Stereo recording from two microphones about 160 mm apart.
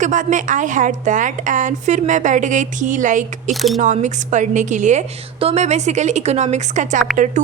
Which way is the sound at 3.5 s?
Centre (ahead or behind).